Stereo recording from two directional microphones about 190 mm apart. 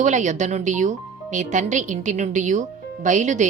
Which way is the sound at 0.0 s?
40° right (ahead or behind).